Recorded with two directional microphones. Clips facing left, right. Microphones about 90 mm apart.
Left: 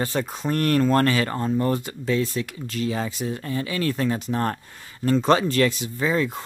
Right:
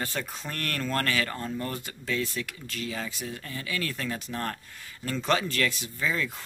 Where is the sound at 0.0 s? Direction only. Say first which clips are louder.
Left 8 dB; 30° left (ahead or behind).